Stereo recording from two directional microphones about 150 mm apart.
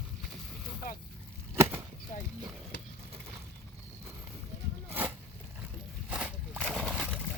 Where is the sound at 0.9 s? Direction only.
70° left (ahead or behind).